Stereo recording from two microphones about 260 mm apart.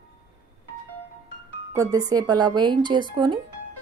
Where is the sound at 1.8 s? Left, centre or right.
Centre.